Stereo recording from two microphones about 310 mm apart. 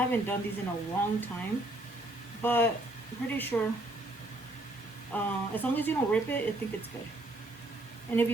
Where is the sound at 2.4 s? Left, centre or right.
Centre.